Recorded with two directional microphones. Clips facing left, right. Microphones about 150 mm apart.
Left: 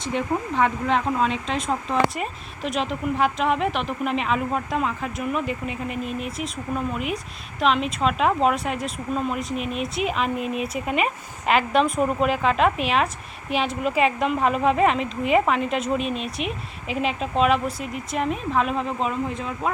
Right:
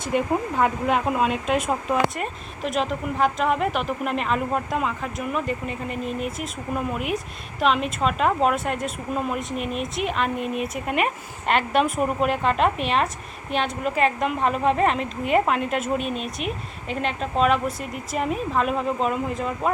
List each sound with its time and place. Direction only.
0.1 s a woman's voice: 10° right (ahead or behind)